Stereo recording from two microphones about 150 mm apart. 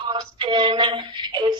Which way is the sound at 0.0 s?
30° right (ahead or behind).